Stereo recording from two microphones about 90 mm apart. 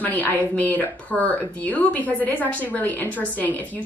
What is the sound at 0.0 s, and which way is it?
A woman's voice, 20° left (ahead or behind).